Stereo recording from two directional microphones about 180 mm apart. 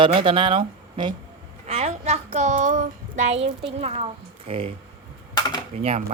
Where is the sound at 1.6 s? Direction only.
35° right (ahead or behind).